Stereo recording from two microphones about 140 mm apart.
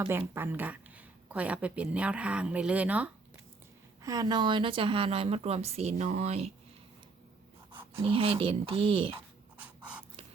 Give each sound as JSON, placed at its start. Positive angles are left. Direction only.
{"t": 0.0, "sound": "speech", "side_deg": -15}
{"t": 4.0, "sound": "a woman's voice", "side_deg": -25}
{"t": 8.0, "sound": "speech", "side_deg": -40}
{"t": 9.6, "sound": "printer", "side_deg": -10}